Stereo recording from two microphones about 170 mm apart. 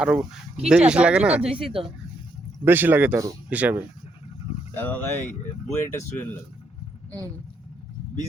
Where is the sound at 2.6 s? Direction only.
10° right (ahead or behind).